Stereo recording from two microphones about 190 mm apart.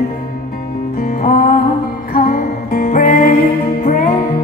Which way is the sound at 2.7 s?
50° left (ahead or behind).